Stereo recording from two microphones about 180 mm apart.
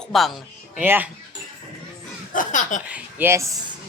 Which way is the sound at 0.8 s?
10° right (ahead or behind).